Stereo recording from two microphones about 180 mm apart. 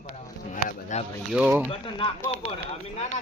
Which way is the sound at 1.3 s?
5° right (ahead or behind).